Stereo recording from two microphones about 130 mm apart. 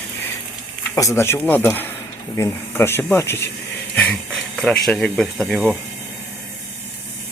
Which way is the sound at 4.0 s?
5° left (ahead or behind).